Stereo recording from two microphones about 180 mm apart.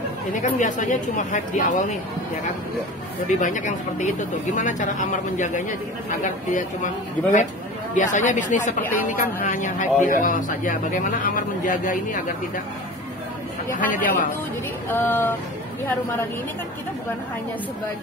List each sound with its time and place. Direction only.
0.3 s a woman's voice: 45° left (ahead or behind)
3.3 s a woman's voice: 45° left (ahead or behind)
7.9 s a woman's voice: 45° left (ahead or behind)
13.7 s a woman's voice: 50° left (ahead or behind)
14.9 s speech: 10° left (ahead or behind)